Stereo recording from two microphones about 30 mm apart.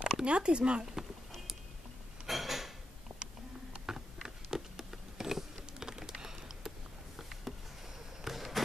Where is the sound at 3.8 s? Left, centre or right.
Centre.